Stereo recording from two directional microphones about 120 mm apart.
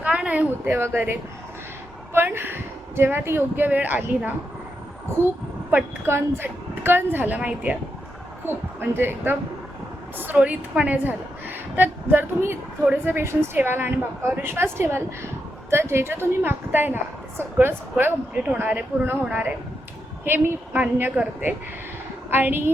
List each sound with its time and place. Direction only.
0.0 s a woman's voice: 10° right (ahead or behind)
6.1 s a woman's voice: 20° right (ahead or behind)